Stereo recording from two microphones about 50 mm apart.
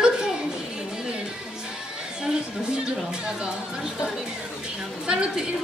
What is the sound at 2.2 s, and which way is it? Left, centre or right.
A woman's voice, centre.